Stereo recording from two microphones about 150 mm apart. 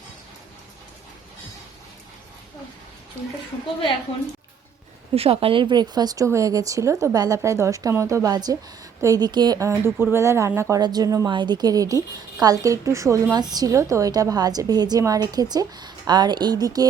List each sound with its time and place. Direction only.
5.1 s speech: 40° right (ahead or behind); by 16.8 s 25° right (ahead or behind)